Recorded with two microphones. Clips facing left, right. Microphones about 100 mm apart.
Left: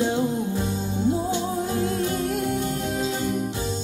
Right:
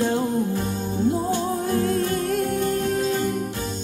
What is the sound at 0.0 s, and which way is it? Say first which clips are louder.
Music: right 1 dB; 15° left (ahead or behind).